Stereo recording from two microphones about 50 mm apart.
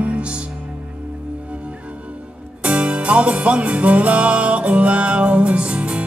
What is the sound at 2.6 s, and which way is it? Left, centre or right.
Music, right.